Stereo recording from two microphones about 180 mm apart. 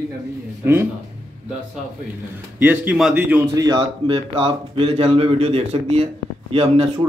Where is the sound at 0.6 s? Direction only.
10° right (ahead or behind).